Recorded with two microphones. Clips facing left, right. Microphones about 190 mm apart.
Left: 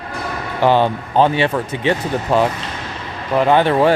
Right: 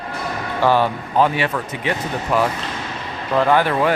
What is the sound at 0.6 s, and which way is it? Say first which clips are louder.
Speech: left 3 dB; 20° left (ahead or behind).